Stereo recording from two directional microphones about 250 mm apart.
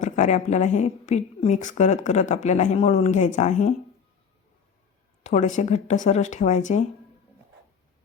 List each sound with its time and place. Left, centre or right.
0.0 s a woman's voice: left
5.2 s a woman's voice: left